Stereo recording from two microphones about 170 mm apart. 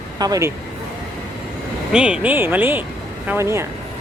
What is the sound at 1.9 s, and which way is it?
Speech, 5° right (ahead or behind).